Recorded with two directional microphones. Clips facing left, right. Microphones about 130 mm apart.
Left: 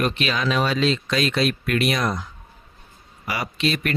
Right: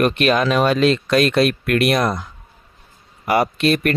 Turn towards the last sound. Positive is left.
turn(degrees=-55)  # may be behind; listen again after turning